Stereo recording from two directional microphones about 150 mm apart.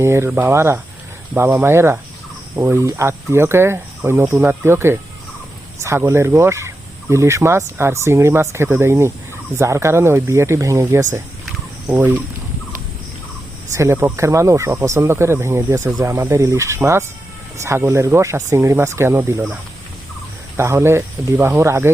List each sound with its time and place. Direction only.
0.0 s speech: 15° right (ahead or behind)
13.7 s speech: 20° right (ahead or behind)
20.6 s speech: 15° right (ahead or behind)